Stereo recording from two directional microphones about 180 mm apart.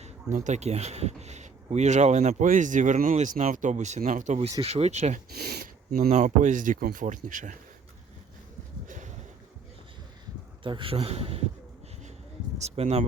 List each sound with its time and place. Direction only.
0.0 s speech: 40° right (ahead or behind)
5.4 s speech: 60° right (ahead or behind)
6.1 s speech: 40° right (ahead or behind)
10.6 s speech: 30° right (ahead or behind)
12.5 s speech: 35° right (ahead or behind)